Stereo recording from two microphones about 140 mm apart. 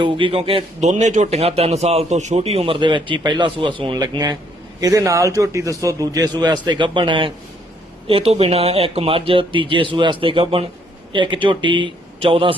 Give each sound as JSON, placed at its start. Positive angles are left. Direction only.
{"t": 0.0, "sound": "a man's voice", "side_deg": -35}